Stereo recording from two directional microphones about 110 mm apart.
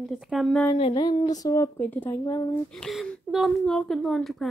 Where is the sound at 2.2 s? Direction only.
30° left (ahead or behind).